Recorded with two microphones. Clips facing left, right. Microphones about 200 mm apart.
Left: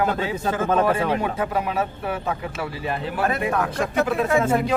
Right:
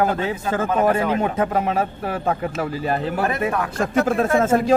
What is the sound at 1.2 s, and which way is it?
Speech, 45° right (ahead or behind).